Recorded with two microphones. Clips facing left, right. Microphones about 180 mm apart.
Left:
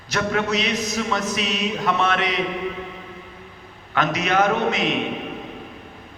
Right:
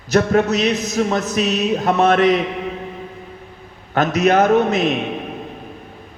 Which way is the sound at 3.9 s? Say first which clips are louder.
Right 6 dB; 45° right (ahead or behind).